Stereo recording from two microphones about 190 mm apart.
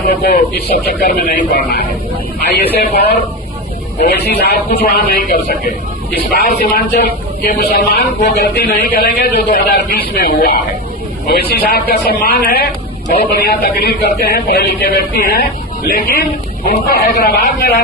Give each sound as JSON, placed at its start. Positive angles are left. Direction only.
{"t": 0.7, "sound": "a man's voice", "side_deg": 50}